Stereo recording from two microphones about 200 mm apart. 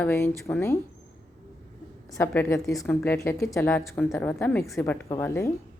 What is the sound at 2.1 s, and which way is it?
Speech, 10° left (ahead or behind).